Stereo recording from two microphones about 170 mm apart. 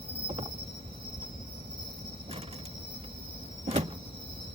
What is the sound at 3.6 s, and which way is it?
Power windows, 40° right (ahead or behind).